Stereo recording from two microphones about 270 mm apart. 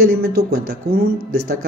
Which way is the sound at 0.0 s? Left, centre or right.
Right.